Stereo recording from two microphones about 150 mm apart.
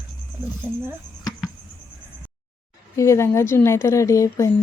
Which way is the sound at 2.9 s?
20° left (ahead or behind).